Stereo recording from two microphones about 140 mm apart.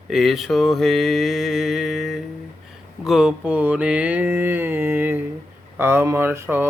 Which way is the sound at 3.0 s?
5° right (ahead or behind).